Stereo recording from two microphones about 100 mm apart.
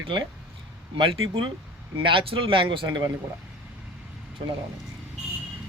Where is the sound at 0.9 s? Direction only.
55° right (ahead or behind).